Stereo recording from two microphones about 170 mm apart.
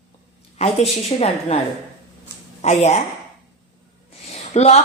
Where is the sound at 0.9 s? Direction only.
40° left (ahead or behind).